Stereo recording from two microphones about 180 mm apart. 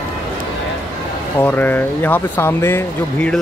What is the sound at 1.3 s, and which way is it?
Speech, 10° left (ahead or behind).